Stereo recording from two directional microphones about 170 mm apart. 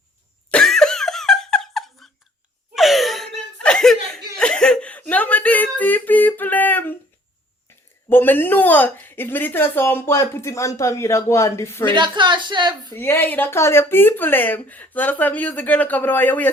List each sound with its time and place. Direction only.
0.5 s cough: 5° left (ahead or behind)
2.7 s laughter: centre (ahead or behind)
8.1 s speech: 10° left (ahead or behind)
11.9 s speech: 25° right (ahead or behind)
12.9 s speech: 15° left (ahead or behind)